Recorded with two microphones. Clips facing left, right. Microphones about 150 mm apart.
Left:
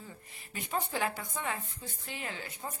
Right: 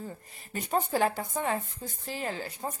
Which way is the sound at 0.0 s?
40° right (ahead or behind).